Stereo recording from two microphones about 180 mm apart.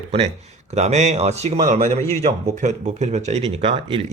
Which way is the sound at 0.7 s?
40° right (ahead or behind).